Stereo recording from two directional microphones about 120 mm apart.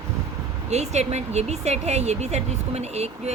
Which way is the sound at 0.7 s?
65° right (ahead or behind).